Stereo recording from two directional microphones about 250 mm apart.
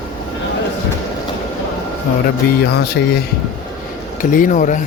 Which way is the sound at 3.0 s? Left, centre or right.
Left.